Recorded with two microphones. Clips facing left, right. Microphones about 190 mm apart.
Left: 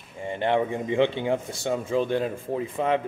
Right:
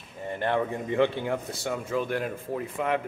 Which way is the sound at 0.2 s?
20° left (ahead or behind).